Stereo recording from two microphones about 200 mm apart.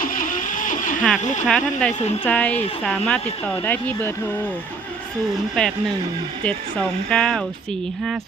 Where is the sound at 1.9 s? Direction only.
35° left (ahead or behind).